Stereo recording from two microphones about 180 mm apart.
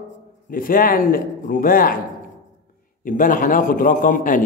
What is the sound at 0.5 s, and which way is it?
A man's voice, 50° left (ahead or behind).